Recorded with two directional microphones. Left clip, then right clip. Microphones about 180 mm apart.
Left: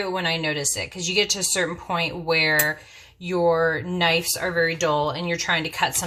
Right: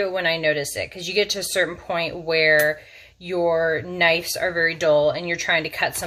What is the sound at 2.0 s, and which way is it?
Speech, 15° right (ahead or behind).